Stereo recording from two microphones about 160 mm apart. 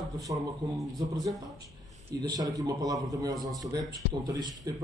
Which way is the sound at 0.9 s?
25° right (ahead or behind).